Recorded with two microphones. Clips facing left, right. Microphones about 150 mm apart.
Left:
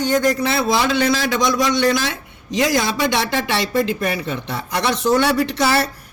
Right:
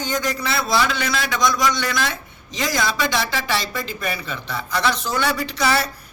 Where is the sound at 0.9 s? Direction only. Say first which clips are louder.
Left 7 dB; 30° left (ahead or behind).